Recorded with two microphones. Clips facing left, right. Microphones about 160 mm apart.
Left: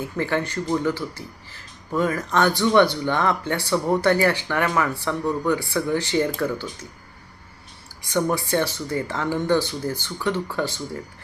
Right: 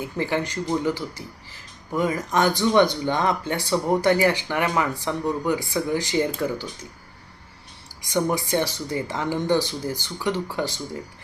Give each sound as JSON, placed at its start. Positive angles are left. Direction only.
{"t": 0.0, "sound": "speech", "side_deg": -15}
{"t": 8.1, "sound": "speech", "side_deg": -15}